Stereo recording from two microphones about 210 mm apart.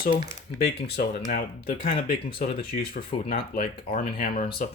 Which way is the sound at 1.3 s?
45° left (ahead or behind).